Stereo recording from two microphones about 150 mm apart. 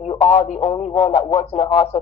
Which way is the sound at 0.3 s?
50° left (ahead or behind).